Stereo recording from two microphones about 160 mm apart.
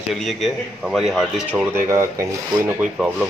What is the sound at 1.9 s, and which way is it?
Speech, 20° right (ahead or behind).